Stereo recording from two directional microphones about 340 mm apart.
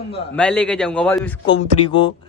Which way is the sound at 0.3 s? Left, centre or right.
Centre.